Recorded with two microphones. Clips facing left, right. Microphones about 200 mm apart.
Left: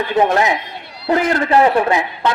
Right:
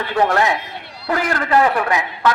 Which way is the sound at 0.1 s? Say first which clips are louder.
Left 1 dB; 20° left (ahead or behind).